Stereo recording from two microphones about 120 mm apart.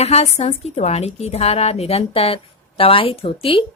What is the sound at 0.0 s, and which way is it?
A woman's voice, 60° left (ahead or behind).